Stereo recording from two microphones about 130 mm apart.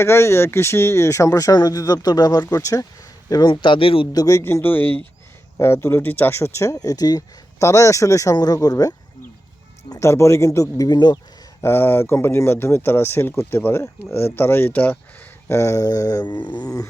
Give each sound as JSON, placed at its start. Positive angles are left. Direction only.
{"t": 0.0, "sound": "speech", "side_deg": 20}
{"t": 4.1, "sound": "speech", "side_deg": 25}
{"t": 11.6, "sound": "speech", "side_deg": 20}